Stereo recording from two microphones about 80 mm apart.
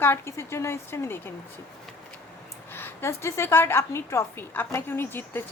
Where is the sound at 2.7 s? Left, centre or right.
Left.